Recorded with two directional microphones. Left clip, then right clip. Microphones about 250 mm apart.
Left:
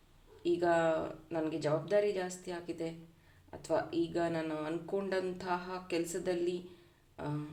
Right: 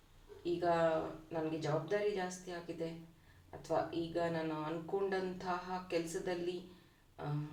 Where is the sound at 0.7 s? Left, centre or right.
Left.